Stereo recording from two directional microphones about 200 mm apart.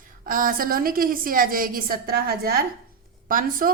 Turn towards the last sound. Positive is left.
turn(degrees=-45)  # may be behind; listen again after turning